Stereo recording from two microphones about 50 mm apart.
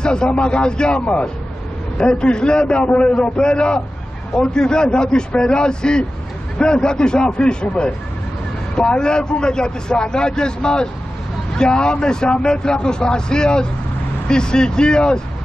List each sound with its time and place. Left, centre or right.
0.0 s a man's voice: centre
9.0 s speech: centre